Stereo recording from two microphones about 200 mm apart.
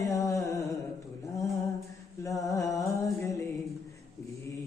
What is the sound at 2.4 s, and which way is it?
Music, 15° left (ahead or behind).